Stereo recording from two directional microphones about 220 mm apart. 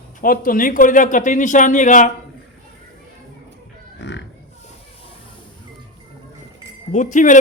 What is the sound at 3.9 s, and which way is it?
Speech, 55° left (ahead or behind).